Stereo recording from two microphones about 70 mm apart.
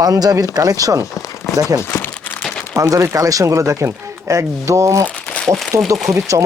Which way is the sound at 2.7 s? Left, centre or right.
Right.